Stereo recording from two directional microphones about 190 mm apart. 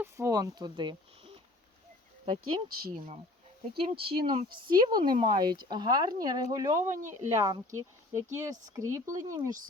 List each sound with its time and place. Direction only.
0.0 s speech: 15° right (ahead or behind)
3.8 s speech: 30° right (ahead or behind)